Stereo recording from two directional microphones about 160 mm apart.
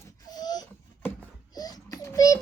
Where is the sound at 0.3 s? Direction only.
25° left (ahead or behind).